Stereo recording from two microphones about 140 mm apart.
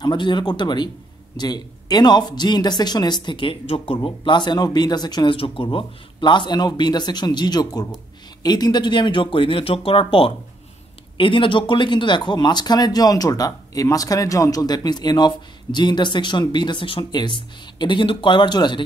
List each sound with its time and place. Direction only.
0.0 s speech: 35° left (ahead or behind)